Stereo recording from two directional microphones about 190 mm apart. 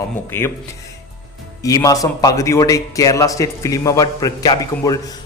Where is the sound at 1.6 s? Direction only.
20° left (ahead or behind).